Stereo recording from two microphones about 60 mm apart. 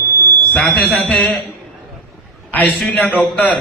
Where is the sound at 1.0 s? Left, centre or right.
Centre.